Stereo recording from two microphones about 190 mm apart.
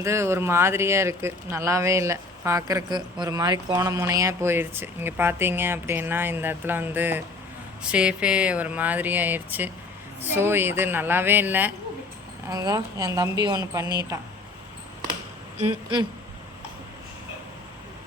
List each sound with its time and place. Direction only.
0.0 s a woman's voice: 15° right (ahead or behind)
13.8 s speech: 25° left (ahead or behind)